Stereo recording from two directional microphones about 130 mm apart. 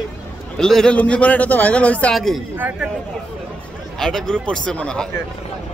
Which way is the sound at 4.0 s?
5° left (ahead or behind).